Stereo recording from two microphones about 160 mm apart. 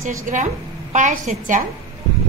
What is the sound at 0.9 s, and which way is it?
Speech, 50° right (ahead or behind).